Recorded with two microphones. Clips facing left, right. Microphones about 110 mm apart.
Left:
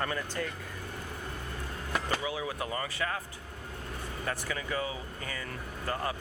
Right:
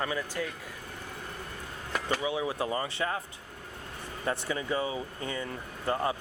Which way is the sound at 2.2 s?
25° right (ahead or behind).